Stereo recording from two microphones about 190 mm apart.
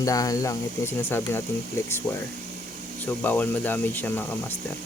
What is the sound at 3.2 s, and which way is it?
Speech, 10° left (ahead or behind).